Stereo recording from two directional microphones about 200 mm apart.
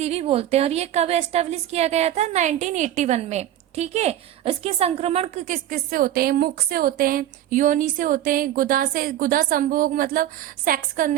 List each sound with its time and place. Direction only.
0.0 s a woman's voice: 30° right (ahead or behind)